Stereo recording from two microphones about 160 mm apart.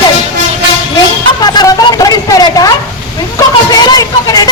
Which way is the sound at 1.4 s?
25° left (ahead or behind).